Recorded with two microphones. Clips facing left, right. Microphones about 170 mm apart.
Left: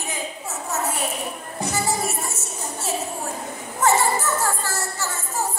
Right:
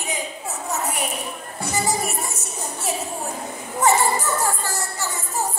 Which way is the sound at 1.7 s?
15° right (ahead or behind).